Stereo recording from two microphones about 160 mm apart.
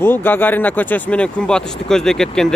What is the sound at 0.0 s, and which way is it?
Speech, 15° left (ahead or behind).